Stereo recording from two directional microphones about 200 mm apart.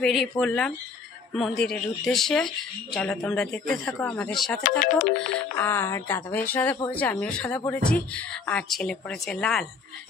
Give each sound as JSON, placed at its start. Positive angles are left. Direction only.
{"t": 0.0, "sound": "speech", "side_deg": 0}
{"t": 4.6, "sound": "speech", "side_deg": 40}
{"t": 5.6, "sound": "a woman's voice", "side_deg": 10}